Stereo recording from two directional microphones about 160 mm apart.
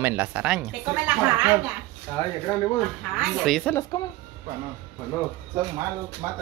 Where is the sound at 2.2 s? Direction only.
30° left (ahead or behind).